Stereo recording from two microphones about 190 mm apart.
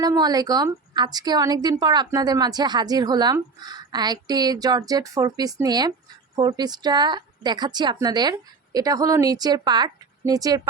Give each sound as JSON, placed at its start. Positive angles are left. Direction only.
{"t": 0.0, "sound": "a woman's voice", "side_deg": -20}